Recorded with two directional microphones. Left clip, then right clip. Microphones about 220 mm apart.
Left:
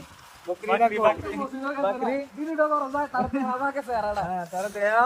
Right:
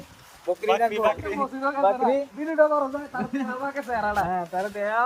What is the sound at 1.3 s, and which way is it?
Speech, 20° right (ahead or behind).